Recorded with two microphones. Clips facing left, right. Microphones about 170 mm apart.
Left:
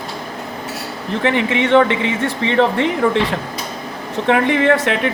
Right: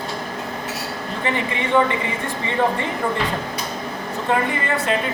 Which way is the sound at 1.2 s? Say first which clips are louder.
Left 7 dB; 75° left (ahead or behind).